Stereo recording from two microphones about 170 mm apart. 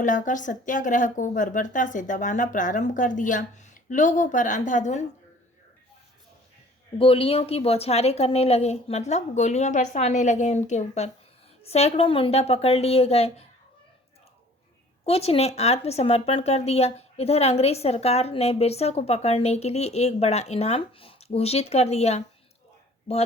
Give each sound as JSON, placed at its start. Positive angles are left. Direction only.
{"t": 0.0, "sound": "a woman's voice", "side_deg": 50}
{"t": 7.0, "sound": "speech", "side_deg": 35}
{"t": 15.0, "sound": "speech", "side_deg": 35}